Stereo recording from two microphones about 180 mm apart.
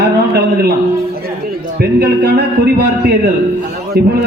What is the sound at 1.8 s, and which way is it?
Speech, 60° right (ahead or behind).